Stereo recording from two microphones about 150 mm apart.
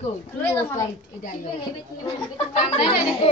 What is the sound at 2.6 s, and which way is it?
Speech, 40° left (ahead or behind).